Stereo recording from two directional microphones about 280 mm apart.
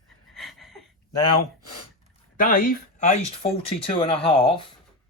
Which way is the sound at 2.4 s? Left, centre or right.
Left.